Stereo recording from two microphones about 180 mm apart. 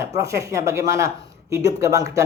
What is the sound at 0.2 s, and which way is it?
Speech, 15° right (ahead or behind).